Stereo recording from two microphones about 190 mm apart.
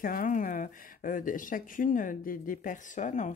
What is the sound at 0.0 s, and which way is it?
Speech, 50° left (ahead or behind).